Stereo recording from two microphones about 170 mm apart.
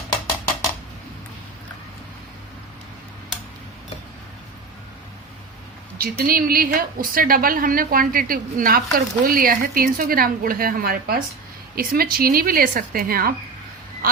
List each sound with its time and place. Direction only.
6.0 s a woman's voice: 60° right (ahead or behind)